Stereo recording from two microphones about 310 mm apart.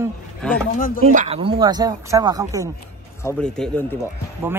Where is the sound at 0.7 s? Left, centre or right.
Left.